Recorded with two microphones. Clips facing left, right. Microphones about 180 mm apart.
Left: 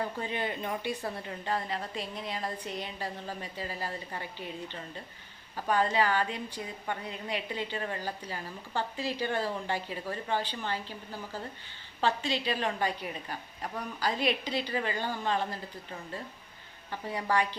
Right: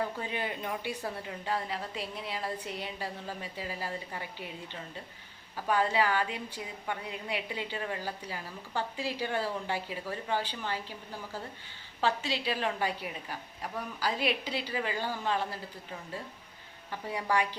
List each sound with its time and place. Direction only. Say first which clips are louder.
0.2 s a woman's voice: left 2 dB; 10° right (ahead or behind)
17.1 s a woman's voice: left 1 dB; 10° right (ahead or behind)